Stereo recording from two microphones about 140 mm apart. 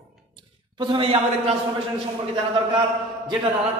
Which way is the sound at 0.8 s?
40° right (ahead or behind).